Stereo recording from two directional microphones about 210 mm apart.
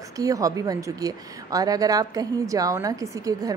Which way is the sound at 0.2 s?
15° right (ahead or behind).